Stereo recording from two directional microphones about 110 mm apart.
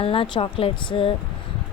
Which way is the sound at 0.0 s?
55° left (ahead or behind).